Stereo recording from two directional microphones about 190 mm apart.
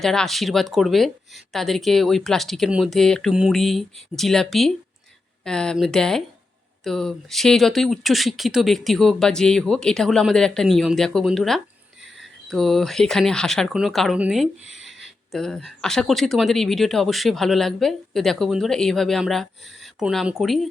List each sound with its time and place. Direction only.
0.0 s speech: centre (ahead or behind)
14.6 s speech: 35° left (ahead or behind)
14.8 s speech: centre (ahead or behind)